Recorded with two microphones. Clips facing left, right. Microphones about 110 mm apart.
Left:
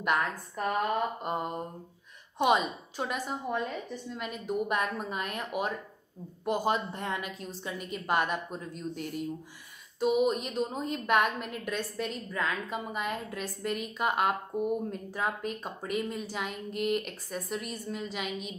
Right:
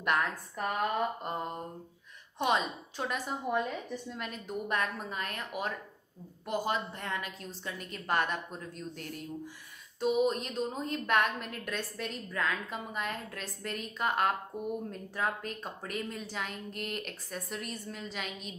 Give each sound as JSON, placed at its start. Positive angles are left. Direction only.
{"t": 0.0, "sound": "a woman's voice", "side_deg": 5}
{"t": 1.2, "sound": "a woman's voice", "side_deg": 15}
{"t": 4.3, "sound": "a woman's voice", "side_deg": 10}